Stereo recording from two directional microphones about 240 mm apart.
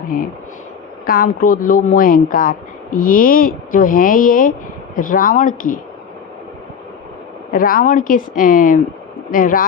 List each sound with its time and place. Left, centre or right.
1.0 s speech: left
7.5 s speech: left